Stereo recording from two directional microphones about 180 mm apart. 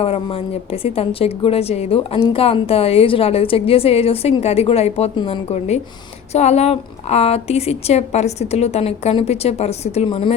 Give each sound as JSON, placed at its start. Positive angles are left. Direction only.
{"t": 0.0, "sound": "a woman's voice", "side_deg": 30}